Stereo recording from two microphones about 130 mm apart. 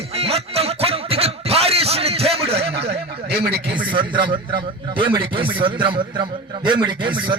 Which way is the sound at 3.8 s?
40° right (ahead or behind).